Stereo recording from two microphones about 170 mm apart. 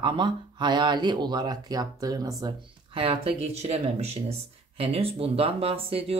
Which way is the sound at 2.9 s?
35° right (ahead or behind).